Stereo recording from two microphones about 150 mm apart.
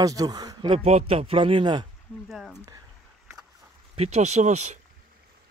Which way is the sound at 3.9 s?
45° right (ahead or behind).